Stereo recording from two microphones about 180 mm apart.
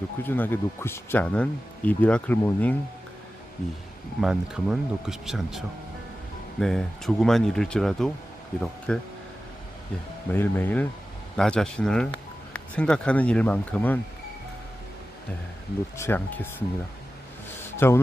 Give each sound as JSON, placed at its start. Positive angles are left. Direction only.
{"t": 0.2, "sound": "speech", "side_deg": 10}
{"t": 4.2, "sound": "speech", "side_deg": -5}
{"t": 10.3, "sound": "speech", "side_deg": 10}
{"t": 16.0, "sound": "speech", "side_deg": 10}
{"t": 17.7, "sound": "speech", "side_deg": 15}